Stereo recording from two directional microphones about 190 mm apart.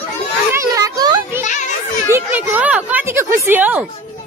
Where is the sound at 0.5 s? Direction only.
15° right (ahead or behind).